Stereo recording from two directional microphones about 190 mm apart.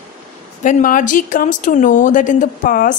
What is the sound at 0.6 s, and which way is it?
Speech, 45° left (ahead or behind).